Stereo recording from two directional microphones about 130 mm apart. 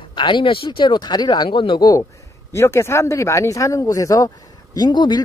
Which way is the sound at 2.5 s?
20° left (ahead or behind).